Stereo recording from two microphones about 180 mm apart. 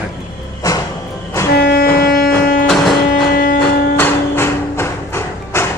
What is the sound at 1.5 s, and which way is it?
Music, 60° left (ahead or behind).